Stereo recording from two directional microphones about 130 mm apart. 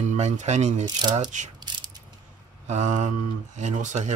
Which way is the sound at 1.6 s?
35° right (ahead or behind).